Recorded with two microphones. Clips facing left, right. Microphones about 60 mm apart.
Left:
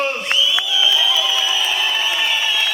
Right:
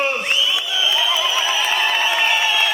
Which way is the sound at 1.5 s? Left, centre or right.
Right.